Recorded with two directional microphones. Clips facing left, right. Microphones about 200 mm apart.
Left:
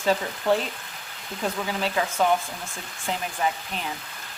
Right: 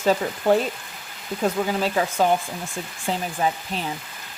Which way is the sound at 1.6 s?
45° right (ahead or behind).